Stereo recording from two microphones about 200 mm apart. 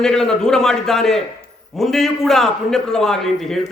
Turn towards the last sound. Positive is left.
turn(degrees=0)  # may be behind; listen again after turning